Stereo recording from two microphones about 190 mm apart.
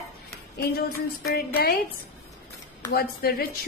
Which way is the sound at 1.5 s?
55° left (ahead or behind).